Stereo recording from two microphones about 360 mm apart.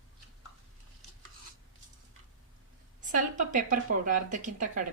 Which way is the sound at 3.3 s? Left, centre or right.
Right.